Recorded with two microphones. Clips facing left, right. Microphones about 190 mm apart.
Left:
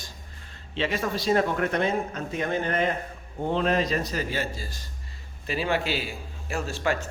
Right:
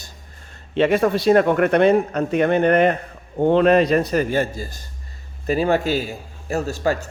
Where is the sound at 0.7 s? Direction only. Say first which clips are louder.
Right 11 dB; 55° right (ahead or behind).